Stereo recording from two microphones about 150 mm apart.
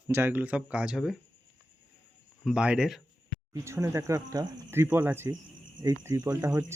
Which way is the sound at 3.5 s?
20° right (ahead or behind).